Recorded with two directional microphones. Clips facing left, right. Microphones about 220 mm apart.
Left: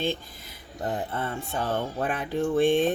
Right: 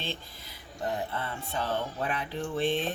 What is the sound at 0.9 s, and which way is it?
Speech, 50° left (ahead or behind).